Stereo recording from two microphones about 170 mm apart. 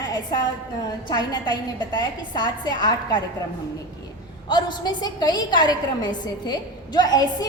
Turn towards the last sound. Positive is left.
turn(degrees=25)  # may be behind; listen again after turning